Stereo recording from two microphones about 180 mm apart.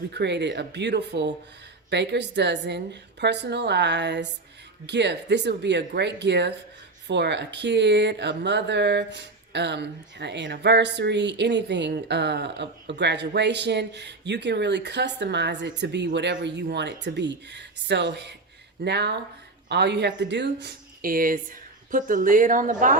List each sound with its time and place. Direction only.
0.1 s speech: 70° right (ahead or behind); by 22.7 s 50° right (ahead or behind)